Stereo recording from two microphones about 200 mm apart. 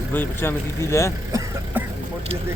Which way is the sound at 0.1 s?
10° left (ahead or behind).